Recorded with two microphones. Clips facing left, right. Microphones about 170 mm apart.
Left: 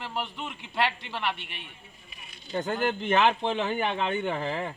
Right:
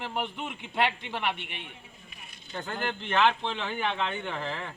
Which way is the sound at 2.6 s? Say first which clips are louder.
Left 6 dB; 45° left (ahead or behind).